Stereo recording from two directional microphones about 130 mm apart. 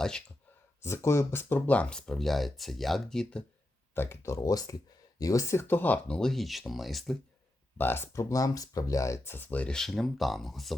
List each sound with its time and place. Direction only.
0.8 s speech: 20° left (ahead or behind); by 3.4 s 5° left (ahead or behind)
3.9 s speech: 20° left (ahead or behind); by 7.2 s centre (ahead or behind)
7.8 s speech: 15° left (ahead or behind); by 10.8 s centre (ahead or behind)